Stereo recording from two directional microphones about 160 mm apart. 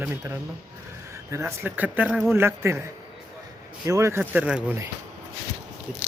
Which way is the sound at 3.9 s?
20° right (ahead or behind).